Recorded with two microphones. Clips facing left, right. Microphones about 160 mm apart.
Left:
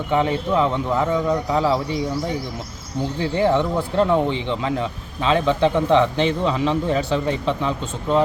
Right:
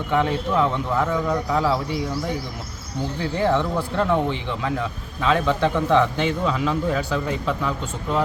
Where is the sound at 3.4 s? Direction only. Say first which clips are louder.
Left 2 dB; 15° left (ahead or behind).